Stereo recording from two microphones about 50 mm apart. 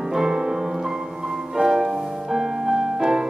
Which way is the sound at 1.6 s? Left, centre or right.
Centre.